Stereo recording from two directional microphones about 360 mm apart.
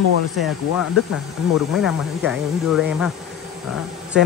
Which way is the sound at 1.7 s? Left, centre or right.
Centre.